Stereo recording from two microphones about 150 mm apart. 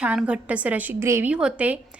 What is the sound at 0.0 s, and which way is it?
A woman's voice, 5° right (ahead or behind).